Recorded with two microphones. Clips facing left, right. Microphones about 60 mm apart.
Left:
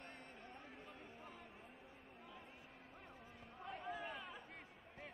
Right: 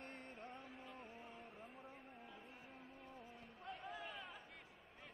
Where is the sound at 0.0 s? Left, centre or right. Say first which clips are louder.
Right 2 dB; right.